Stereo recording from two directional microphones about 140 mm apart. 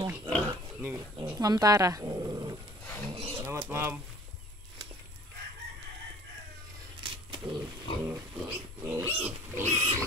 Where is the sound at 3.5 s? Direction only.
15° right (ahead or behind).